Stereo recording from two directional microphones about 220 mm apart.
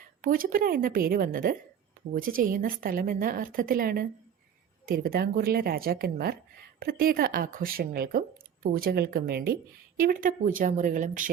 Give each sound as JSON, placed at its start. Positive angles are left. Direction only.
{"t": 0.2, "sound": "a woman's voice", "side_deg": -40}